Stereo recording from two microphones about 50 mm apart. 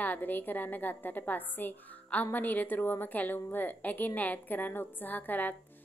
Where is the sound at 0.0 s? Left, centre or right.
Left.